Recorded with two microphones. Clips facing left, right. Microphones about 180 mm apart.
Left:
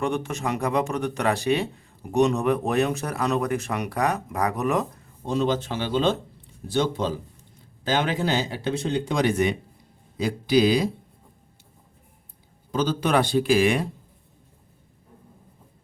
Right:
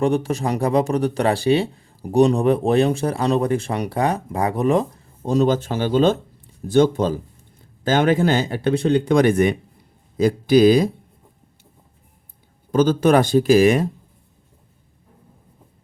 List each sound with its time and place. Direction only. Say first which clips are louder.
0.0 s speech: right 6 dB; 35° right (ahead or behind)
5.2 s speech: right 6 dB; 40° right (ahead or behind)
12.7 s speech: right 7 dB; 50° right (ahead or behind)